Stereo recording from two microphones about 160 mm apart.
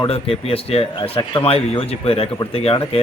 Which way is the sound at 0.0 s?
35° left (ahead or behind).